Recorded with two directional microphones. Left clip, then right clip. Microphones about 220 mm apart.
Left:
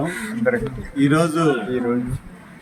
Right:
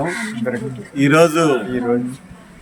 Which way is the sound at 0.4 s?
15° left (ahead or behind).